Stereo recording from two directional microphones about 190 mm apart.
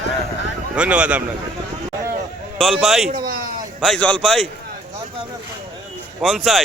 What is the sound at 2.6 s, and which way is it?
Speech, centre (ahead or behind).